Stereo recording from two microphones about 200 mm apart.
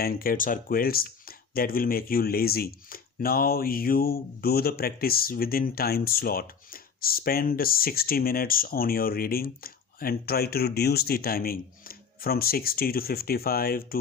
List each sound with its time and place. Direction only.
0.0 s speech: 45° left (ahead or behind)